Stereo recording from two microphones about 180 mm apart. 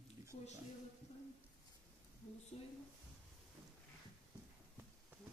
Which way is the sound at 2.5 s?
35° left (ahead or behind).